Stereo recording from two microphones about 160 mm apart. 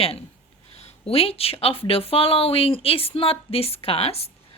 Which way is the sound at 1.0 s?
35° left (ahead or behind).